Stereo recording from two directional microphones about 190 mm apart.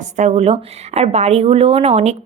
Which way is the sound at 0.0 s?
35° right (ahead or behind).